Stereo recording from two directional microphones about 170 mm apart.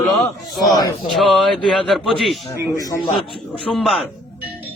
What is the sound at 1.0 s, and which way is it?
A man's voice, centre (ahead or behind).